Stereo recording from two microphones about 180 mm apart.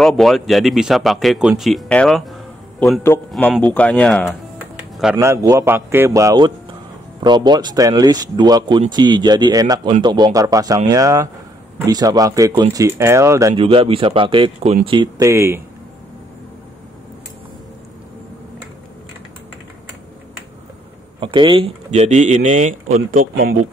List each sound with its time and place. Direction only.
0.0 s speech: centre (ahead or behind)
5.2 s a man's voice: 15° right (ahead or behind)
13.6 s a man's voice: 30° right (ahead or behind); by 15.6 s 15° right (ahead or behind)
21.2 s speech: 25° right (ahead or behind); by 23.7 s 50° right (ahead or behind)